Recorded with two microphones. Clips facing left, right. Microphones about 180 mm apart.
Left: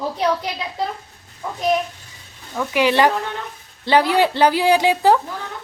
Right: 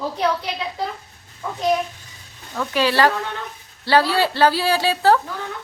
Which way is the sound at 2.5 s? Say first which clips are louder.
Left 2 dB; 15° left (ahead or behind).